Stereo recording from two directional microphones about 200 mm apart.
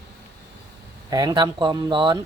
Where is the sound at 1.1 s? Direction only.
20° right (ahead or behind).